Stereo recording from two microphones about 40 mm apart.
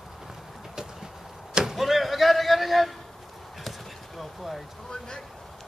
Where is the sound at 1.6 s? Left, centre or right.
Centre.